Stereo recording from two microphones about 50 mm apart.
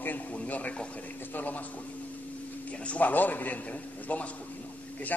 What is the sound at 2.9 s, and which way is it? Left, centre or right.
A man's voice, left.